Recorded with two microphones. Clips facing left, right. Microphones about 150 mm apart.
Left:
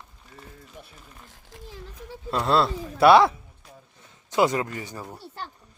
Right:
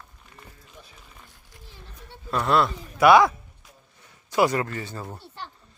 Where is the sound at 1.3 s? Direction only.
90° left.